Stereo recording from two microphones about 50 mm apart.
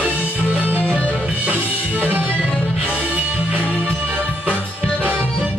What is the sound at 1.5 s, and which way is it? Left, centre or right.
Music, right.